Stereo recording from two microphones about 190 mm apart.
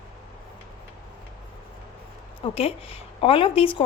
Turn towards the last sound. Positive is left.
turn(degrees=30)  # may be behind; listen again after turning